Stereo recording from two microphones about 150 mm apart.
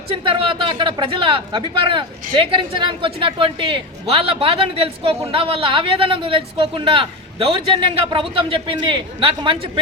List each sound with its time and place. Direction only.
0.1 s speech: 35° right (ahead or behind)